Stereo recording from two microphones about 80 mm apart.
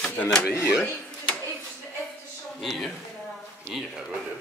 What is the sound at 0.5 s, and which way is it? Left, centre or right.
Speech, left.